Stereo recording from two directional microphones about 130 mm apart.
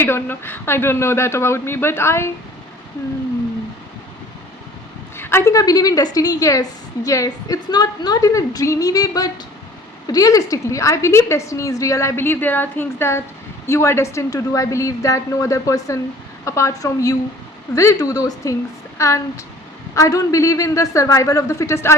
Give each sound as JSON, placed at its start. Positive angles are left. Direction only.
{"t": 0.0, "sound": "a woman's voice", "side_deg": 15}
{"t": 5.1, "sound": "a woman's voice", "side_deg": 20}